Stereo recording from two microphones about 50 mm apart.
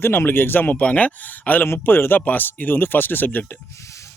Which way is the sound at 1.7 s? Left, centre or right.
Left.